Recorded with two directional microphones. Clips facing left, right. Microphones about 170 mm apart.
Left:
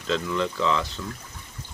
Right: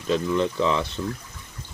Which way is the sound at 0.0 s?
15° right (ahead or behind).